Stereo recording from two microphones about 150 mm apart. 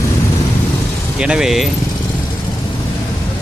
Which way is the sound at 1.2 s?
5° right (ahead or behind).